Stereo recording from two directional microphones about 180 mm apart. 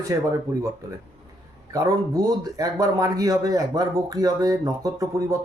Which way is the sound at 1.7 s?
20° right (ahead or behind).